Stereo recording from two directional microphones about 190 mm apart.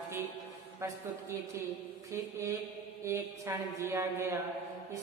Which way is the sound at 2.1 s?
15° right (ahead or behind).